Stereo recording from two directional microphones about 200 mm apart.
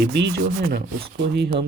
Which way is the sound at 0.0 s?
55° right (ahead or behind).